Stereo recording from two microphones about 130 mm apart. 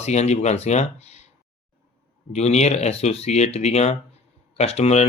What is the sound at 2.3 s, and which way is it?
Speech, 55° left (ahead or behind).